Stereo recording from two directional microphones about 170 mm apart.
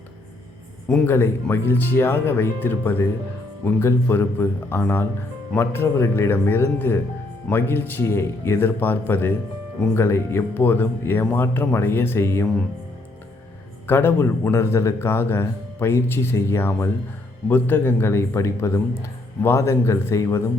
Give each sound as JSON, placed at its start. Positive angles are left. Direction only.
{"t": 0.9, "sound": "a man's voice", "side_deg": 10}
{"t": 13.8, "sound": "a man's voice", "side_deg": 15}